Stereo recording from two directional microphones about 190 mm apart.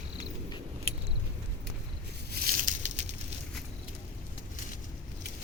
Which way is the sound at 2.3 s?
45° right (ahead or behind).